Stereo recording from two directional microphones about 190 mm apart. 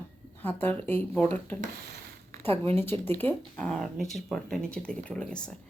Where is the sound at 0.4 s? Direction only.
10° left (ahead or behind).